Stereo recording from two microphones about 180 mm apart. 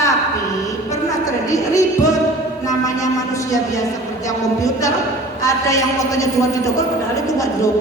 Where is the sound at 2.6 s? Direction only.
20° left (ahead or behind).